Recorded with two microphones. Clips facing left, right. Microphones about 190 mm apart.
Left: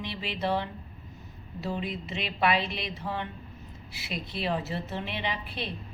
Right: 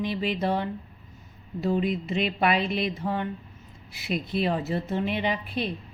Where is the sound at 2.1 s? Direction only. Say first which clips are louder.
Right 3 dB; 45° right (ahead or behind).